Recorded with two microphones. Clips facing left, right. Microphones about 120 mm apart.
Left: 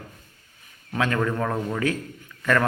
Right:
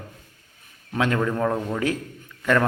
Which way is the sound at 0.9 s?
20° right (ahead or behind).